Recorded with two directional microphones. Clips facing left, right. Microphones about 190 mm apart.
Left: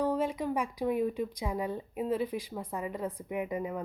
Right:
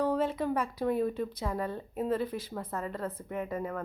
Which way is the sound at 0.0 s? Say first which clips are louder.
Right 1 dB; 10° left (ahead or behind).